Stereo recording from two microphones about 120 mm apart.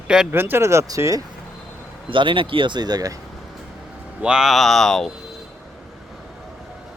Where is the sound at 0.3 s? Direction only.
20° right (ahead or behind).